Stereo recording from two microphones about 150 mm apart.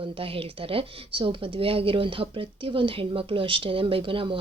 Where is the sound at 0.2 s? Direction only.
40° right (ahead or behind).